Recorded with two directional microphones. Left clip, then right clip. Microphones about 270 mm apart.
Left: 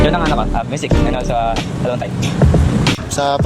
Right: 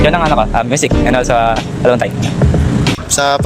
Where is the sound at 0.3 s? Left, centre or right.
Right.